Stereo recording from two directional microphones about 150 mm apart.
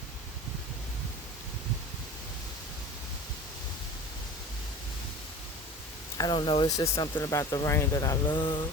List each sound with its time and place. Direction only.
6.1 s speech: 30° left (ahead or behind)